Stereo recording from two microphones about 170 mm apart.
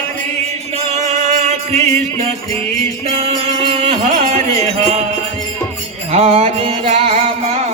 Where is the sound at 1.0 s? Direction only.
45° right (ahead or behind).